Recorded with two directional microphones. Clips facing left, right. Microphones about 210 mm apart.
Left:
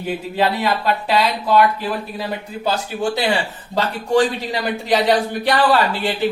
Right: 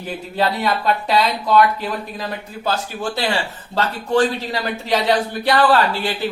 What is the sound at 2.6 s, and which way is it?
Speech, 15° left (ahead or behind).